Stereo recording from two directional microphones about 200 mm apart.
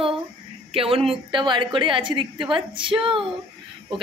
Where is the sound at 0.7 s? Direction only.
30° right (ahead or behind).